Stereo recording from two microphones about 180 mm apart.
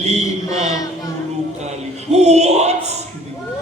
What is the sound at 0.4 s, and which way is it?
Chant, 20° left (ahead or behind).